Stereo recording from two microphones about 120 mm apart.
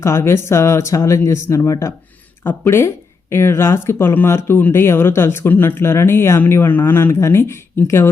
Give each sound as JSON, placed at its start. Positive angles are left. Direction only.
{"t": 0.0, "sound": "speech", "side_deg": 20}